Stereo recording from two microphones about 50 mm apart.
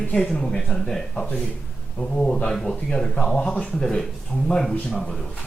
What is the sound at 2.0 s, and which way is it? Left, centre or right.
Speech, left.